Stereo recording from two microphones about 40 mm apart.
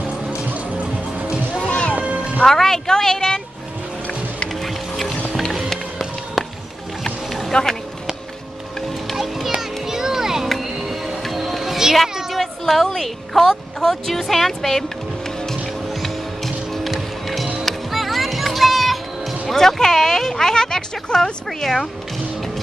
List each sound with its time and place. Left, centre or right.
1.7 s music: left
2.0 s music: right
2.4 s a woman's voice: centre
4.5 s music: centre
7.2 s vehicle: centre
9.1 s music: centre
9.6 s children playing: centre
10.6 s music: centre
12.4 s a woman's voice: centre
15.9 s music: centre
19.5 s speech: centre